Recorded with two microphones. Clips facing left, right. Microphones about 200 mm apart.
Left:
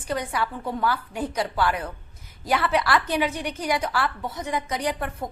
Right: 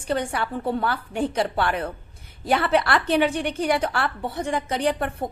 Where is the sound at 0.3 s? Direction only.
30° right (ahead or behind).